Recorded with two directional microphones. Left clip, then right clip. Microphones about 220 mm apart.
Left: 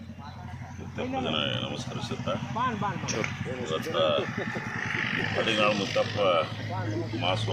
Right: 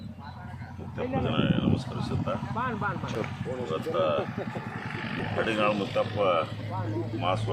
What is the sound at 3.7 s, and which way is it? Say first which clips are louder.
Speech: left 1 dB; centre (ahead or behind).